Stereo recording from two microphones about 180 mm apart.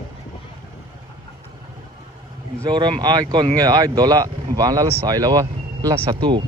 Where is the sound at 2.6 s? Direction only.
25° right (ahead or behind).